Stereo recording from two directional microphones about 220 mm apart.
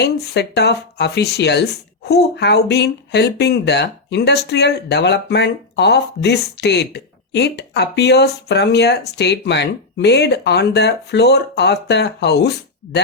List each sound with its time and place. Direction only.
0.0 s speech: 50° left (ahead or behind)